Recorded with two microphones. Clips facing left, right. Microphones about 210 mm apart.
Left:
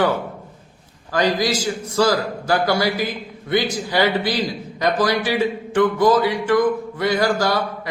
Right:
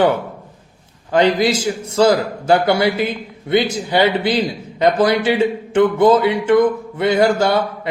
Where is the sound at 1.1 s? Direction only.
25° right (ahead or behind).